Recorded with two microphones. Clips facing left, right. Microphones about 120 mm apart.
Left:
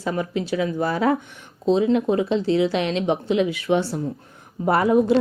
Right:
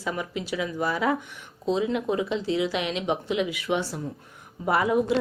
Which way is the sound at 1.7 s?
30° left (ahead or behind).